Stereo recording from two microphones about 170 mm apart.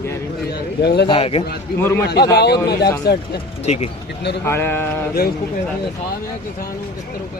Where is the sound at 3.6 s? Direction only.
40° left (ahead or behind).